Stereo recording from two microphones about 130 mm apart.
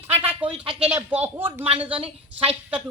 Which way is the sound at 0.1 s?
15° right (ahead or behind).